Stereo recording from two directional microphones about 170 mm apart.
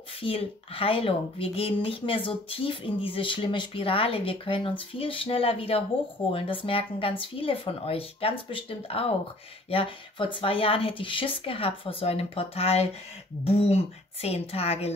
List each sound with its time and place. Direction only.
0.2 s speech: 35° left (ahead or behind)